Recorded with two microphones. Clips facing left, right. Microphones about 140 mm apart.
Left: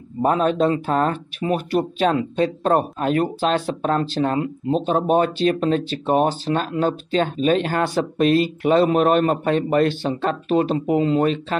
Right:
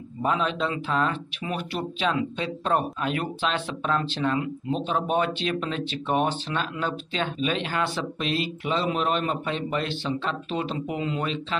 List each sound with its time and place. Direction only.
0.2 s speech: 45° left (ahead or behind)